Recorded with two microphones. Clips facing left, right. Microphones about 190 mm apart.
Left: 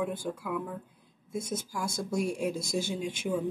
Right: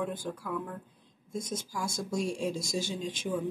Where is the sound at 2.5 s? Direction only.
55° left (ahead or behind).